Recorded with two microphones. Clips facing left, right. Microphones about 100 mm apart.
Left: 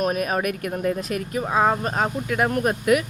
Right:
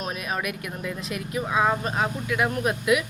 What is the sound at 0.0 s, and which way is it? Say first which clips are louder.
Speech: left 7 dB; 50° left (ahead or behind).